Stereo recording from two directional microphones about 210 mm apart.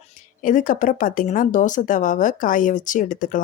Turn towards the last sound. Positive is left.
turn(degrees=40)  # may be behind; listen again after turning